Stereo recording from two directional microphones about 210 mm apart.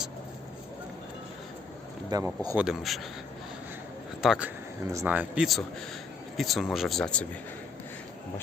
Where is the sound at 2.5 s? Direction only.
5° right (ahead or behind).